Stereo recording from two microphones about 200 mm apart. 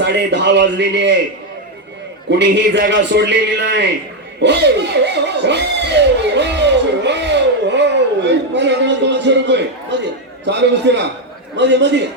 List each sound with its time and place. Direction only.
0.0 s a man's voice: 60° right (ahead or behind)
2.4 s a man's voice: 60° right (ahead or behind)